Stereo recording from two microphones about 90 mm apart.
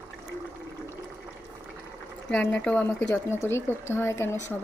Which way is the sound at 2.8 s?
25° left (ahead or behind).